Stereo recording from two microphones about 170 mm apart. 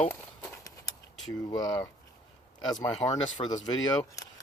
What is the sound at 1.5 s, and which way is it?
Speech, 20° left (ahead or behind).